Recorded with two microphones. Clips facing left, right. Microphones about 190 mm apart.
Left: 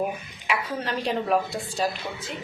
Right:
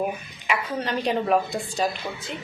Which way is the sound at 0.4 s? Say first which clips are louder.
Right 2 dB; centre (ahead or behind).